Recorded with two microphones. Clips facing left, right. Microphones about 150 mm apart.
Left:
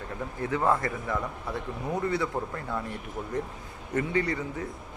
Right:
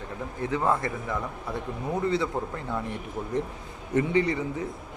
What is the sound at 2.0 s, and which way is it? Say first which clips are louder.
Speech: right 3 dB; 20° right (ahead or behind).